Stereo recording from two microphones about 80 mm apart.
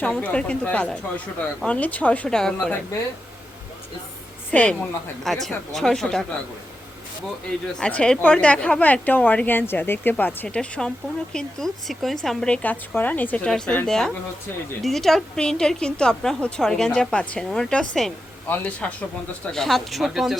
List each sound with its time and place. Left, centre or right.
0.2 s speech: centre
4.5 s speech: centre
7.8 s speech: centre
12.6 s a woman's voice: left
13.4 s speech: centre
18.4 s a woman's voice: left
19.5 s speech: centre